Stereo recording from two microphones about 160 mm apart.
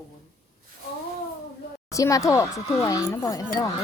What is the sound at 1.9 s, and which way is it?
Speech, 20° left (ahead or behind).